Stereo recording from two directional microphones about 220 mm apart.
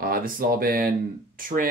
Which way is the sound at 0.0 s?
40° right (ahead or behind).